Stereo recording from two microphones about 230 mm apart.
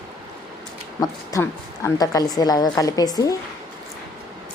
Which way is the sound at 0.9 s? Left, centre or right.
Centre.